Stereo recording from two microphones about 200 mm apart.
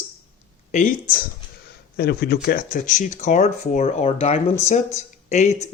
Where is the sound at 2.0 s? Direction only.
50° left (ahead or behind).